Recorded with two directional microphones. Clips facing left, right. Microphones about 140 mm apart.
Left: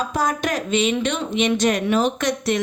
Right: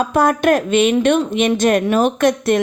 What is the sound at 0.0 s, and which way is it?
Speech, 60° right (ahead or behind).